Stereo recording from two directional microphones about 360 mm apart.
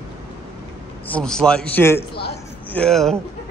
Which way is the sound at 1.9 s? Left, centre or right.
Left.